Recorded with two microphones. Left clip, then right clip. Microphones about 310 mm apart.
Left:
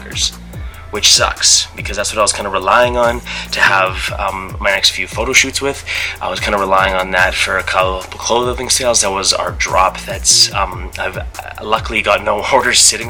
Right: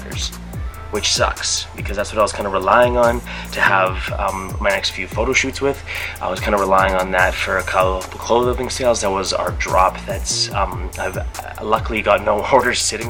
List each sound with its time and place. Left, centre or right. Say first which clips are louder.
0.9 s speech: left 6 dB; centre
8.3 s speech: left 1 dB; right
8.5 s speech: left 4 dB; centre